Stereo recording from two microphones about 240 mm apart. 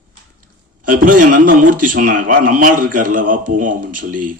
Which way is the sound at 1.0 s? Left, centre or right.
Right.